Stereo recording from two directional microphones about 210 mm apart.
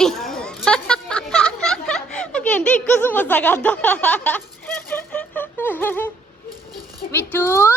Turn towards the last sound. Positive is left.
turn(degrees=10)  # may be behind; listen again after turning